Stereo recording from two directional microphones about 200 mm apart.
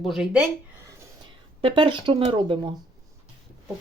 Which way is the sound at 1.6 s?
25° right (ahead or behind).